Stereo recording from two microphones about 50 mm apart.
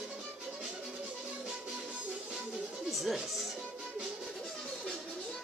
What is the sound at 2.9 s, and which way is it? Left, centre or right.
Music, centre.